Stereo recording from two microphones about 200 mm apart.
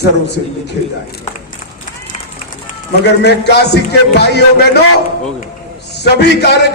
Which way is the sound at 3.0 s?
55° left (ahead or behind).